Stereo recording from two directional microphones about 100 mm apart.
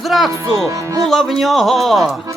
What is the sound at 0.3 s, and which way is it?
Speech, 35° right (ahead or behind).